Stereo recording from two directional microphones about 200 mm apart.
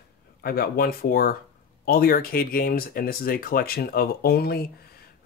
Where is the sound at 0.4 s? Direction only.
50° left (ahead or behind).